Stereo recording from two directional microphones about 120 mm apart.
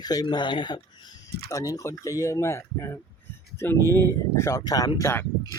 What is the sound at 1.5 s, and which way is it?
Speech, 30° left (ahead or behind).